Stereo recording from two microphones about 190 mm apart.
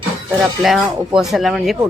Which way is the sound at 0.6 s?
Centre (ahead or behind).